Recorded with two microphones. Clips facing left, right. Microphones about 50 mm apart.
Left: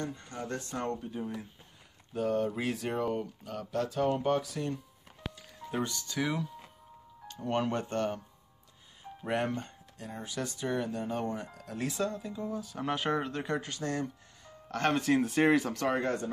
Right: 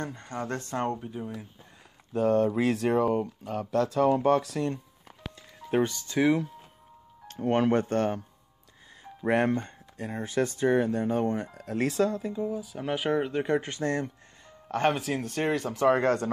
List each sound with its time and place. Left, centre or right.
0.0 s speech: right
0.8 s speech: centre
2.1 s speech: right
5.2 s music: centre
5.8 s speech: right
7.4 s speech: right
9.2 s speech: right
12.4 s speech: centre; by 14.1 s right
15.0 s speech: centre
15.9 s speech: right